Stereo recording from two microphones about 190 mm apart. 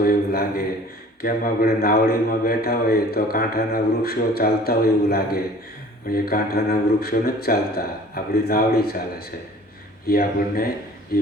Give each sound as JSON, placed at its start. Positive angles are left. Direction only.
{"t": 0.0, "sound": "a man's voice", "side_deg": 50}